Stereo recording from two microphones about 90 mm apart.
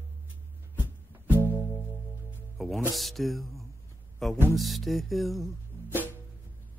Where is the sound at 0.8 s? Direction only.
20° right (ahead or behind).